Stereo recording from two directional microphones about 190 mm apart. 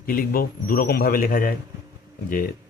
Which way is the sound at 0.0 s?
50° left (ahead or behind).